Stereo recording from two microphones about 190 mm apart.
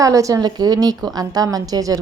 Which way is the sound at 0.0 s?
15° right (ahead or behind).